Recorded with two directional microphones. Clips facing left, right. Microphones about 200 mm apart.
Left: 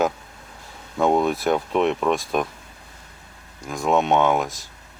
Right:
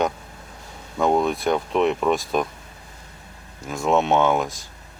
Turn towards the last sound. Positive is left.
turn(degrees=0)  # may be behind; listen again after turning